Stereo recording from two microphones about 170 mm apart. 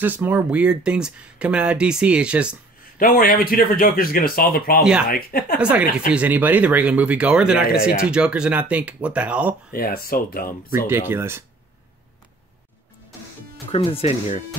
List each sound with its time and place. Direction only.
0.0 s speech: 10° right (ahead or behind)
3.0 s speech: 60° left (ahead or behind)
5.6 s speech: 5° right (ahead or behind)
9.7 s speech: 60° left (ahead or behind)
10.9 s speech: 15° right (ahead or behind)
13.7 s speech: 35° left (ahead or behind)